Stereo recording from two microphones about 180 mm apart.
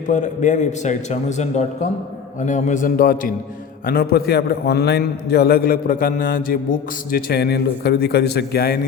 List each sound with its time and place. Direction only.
0.1 s a man's voice: 45° left (ahead or behind); by 8.8 s 60° left (ahead or behind)